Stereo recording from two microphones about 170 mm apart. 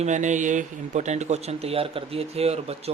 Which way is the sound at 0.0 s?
45° right (ahead or behind).